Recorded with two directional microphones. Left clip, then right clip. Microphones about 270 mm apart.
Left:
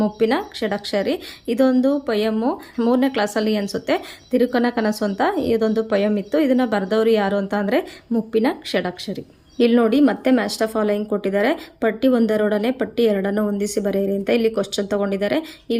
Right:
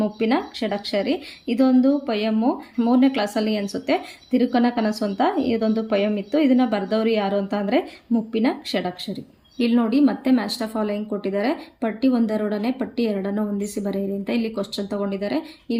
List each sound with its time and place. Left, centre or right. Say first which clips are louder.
0.0 s speech: left 3 dB; centre